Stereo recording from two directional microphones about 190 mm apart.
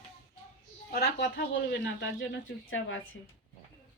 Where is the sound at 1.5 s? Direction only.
60° left (ahead or behind); by 3.2 s 85° left.